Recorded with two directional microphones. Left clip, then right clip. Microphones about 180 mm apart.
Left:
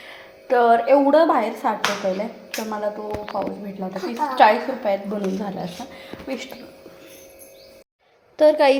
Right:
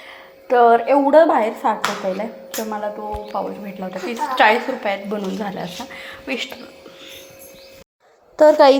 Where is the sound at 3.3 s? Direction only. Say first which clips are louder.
Right 2 dB; 20° right (ahead or behind).